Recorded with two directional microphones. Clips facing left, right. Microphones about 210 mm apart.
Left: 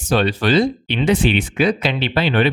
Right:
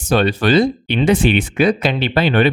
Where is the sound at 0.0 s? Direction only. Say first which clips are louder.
Right 2 dB; 50° right (ahead or behind).